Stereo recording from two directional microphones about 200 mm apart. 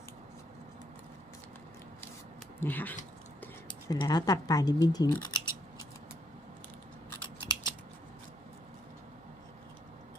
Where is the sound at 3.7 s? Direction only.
20° left (ahead or behind).